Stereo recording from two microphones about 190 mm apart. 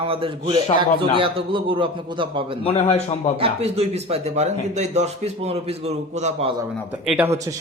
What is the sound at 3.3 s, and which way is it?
Speech, 30° right (ahead or behind).